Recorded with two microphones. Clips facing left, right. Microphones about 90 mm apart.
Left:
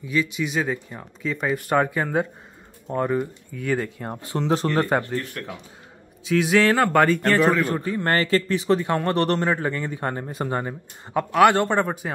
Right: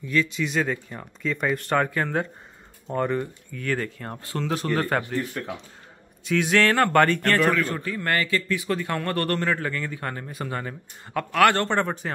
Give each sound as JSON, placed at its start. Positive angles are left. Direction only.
{"t": 0.0, "sound": "speech", "side_deg": 10}
{"t": 5.0, "sound": "speech", "side_deg": -15}
{"t": 6.2, "sound": "a sound", "side_deg": 5}
{"t": 7.6, "sound": "speech", "side_deg": 25}